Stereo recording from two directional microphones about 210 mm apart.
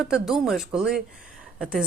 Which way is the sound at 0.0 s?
Centre (ahead or behind).